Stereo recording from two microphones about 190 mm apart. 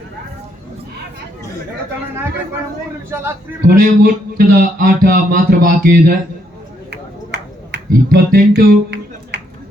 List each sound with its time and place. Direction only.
3.1 s a man's voice: 10° right (ahead or behind)
3.8 s speech: 45° right (ahead or behind)
6.9 s a sound: 65° right (ahead or behind)